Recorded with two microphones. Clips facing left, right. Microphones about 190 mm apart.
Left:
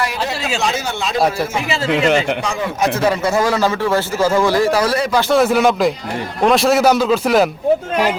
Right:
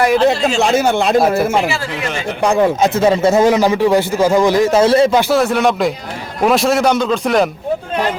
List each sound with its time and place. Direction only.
0.0 s speech: 50° right (ahead or behind)
2.4 s speech: 60° right (ahead or behind)
3.0 s a man's voice: 25° right (ahead or behind)
5.3 s a man's voice: centre (ahead or behind)